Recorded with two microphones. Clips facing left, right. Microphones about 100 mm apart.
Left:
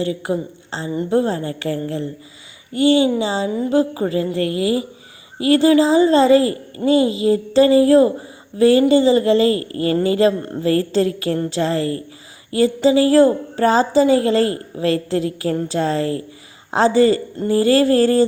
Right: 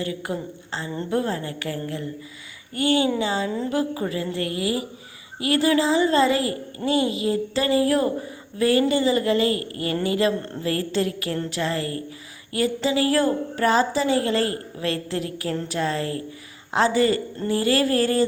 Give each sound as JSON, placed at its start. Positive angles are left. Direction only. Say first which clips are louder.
{"t": 0.0, "sound": "a woman's voice", "louder": "left 7 dB", "side_deg": 25}